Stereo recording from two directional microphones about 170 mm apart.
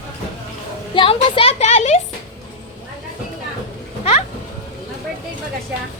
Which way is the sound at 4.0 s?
35° left (ahead or behind).